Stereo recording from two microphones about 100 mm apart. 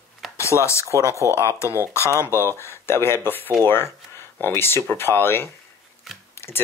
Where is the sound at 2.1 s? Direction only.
25° left (ahead or behind).